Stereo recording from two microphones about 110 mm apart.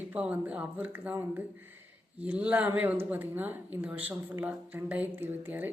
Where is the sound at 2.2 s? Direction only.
15° right (ahead or behind).